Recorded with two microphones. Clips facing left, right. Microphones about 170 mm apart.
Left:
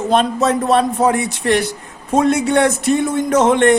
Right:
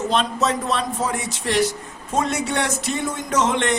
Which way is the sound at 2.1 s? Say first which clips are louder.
Left 8 dB; 60° left (ahead or behind).